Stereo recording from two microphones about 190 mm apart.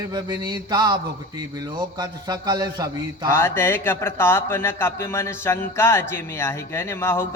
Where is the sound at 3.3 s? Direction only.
15° left (ahead or behind).